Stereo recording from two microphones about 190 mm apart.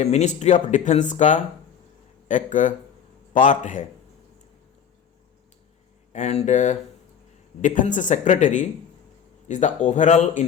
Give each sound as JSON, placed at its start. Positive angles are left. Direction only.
{"t": 0.0, "sound": "speech", "side_deg": 35}
{"t": 6.1, "sound": "speech", "side_deg": 35}